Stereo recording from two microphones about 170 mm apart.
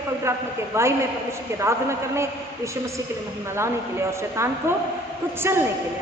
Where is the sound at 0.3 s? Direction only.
15° right (ahead or behind).